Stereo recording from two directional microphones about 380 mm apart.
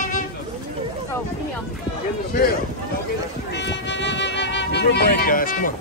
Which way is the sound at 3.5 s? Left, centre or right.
Left.